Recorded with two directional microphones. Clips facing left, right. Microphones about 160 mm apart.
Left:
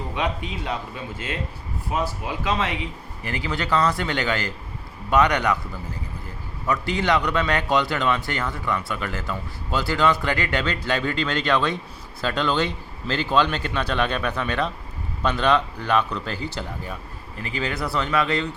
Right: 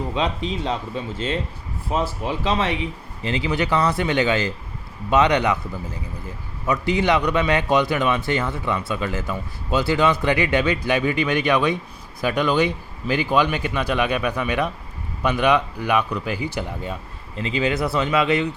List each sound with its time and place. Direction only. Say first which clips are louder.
0.1 s a man's voice: even; 25° right (ahead or behind)